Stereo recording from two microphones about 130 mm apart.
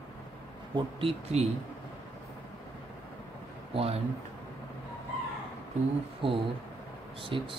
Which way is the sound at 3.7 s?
50° right (ahead or behind).